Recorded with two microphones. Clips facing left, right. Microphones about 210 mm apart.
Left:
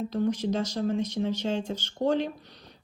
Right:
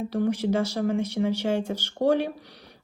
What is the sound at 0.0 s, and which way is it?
Speech, 10° right (ahead or behind).